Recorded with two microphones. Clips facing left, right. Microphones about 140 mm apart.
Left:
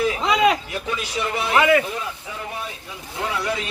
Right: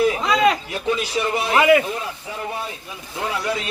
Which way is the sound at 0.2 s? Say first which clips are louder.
Even; 15° left (ahead or behind).